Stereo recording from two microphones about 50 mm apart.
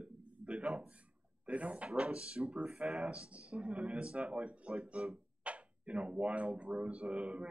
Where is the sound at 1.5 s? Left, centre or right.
Right.